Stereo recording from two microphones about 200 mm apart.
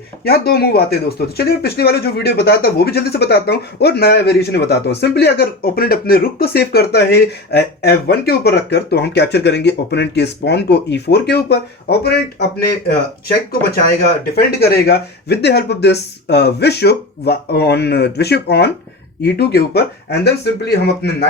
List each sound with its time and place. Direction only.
0.3 s speech: 50° left (ahead or behind)
14.3 s speech: 55° left (ahead or behind)